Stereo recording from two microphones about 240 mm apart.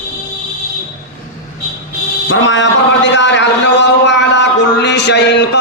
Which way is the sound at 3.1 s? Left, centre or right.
Left.